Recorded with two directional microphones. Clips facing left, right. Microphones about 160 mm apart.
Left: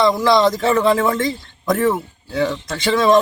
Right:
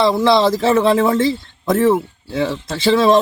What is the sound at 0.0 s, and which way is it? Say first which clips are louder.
Speech: right 1 dB; 25° right (ahead or behind).